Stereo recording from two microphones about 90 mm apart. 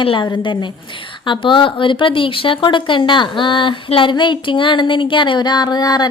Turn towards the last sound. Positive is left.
turn(degrees=45)  # may be behind; listen again after turning